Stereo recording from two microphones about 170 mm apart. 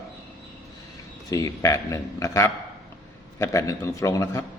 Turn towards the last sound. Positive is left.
turn(degrees=15)  # may be behind; listen again after turning